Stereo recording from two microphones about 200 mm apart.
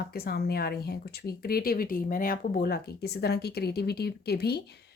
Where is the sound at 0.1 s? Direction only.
50° left (ahead or behind).